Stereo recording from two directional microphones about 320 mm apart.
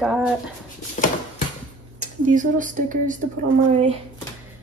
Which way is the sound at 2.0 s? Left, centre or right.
Right.